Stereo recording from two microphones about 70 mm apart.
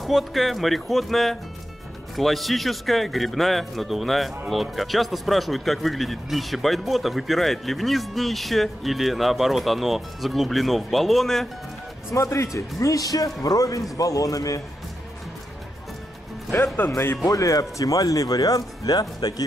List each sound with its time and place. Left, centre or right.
0.0 s speech: centre
12.1 s a man's voice: left
16.9 s speech: left
17.3 s speech: left